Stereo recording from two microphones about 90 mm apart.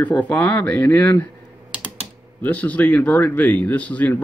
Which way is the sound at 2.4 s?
15° left (ahead or behind).